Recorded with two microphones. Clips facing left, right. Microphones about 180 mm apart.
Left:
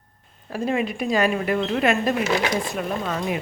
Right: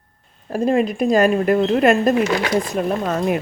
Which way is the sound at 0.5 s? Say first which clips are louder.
Right 6 dB; 40° right (ahead or behind).